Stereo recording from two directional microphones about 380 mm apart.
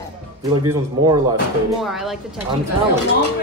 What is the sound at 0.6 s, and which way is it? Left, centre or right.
Speech, centre.